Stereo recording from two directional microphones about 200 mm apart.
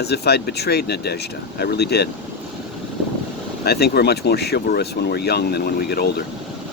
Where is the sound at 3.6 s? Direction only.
55° left (ahead or behind).